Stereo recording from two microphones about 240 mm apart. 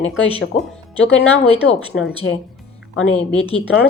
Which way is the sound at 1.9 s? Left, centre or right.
Left.